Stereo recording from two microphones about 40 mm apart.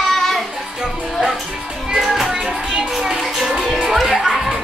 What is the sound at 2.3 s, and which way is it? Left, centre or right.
Music, centre.